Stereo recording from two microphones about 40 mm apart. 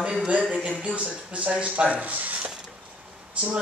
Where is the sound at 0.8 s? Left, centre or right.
Right.